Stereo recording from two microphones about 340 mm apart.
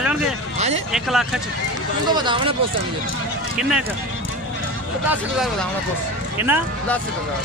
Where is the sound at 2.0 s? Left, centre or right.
Centre.